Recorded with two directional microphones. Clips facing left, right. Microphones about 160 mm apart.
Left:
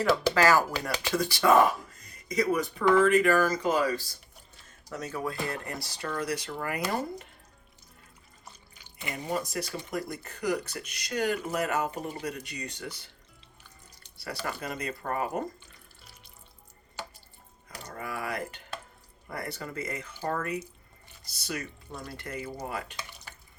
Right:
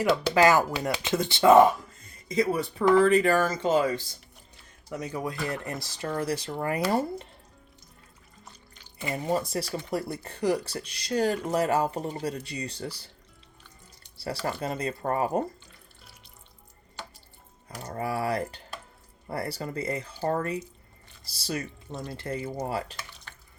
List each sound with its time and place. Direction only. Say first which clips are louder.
0.0 s speech: right 2 dB; 20° right (ahead or behind)
9.0 s speech: right 4 dB; 30° right (ahead or behind)
14.2 s speech: right 5 dB; 30° right (ahead or behind)
17.8 s speech: right 7 dB; 35° right (ahead or behind)
23.3 s water tap: even; 10° left (ahead or behind)